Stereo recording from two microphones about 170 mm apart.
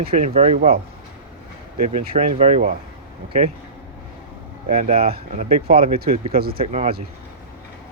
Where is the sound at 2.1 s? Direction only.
40° right (ahead or behind).